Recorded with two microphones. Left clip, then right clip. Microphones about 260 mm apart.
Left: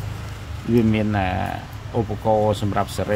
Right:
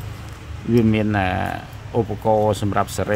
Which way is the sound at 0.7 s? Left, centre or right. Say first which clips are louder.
Right 2 dB; centre.